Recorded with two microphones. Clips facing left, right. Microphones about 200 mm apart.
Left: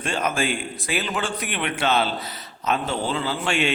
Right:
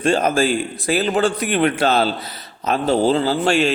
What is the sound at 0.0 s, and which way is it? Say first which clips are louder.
A man's voice: right 8 dB; 35° right (ahead or behind).